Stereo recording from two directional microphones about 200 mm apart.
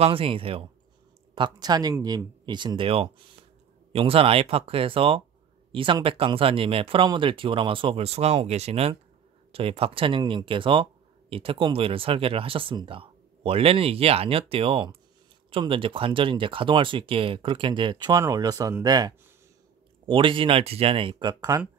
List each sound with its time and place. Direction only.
0.0 s speech: 25° right (ahead or behind)